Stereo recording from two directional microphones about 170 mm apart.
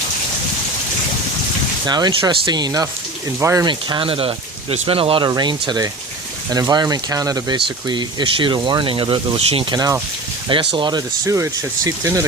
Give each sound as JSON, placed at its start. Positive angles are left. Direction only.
{"t": 1.9, "sound": "speech", "side_deg": -25}